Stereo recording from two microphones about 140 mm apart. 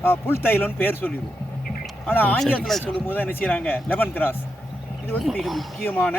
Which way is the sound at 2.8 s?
15° left (ahead or behind).